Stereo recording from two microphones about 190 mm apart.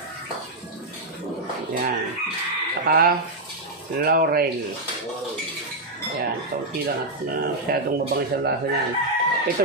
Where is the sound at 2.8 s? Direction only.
50° right (ahead or behind).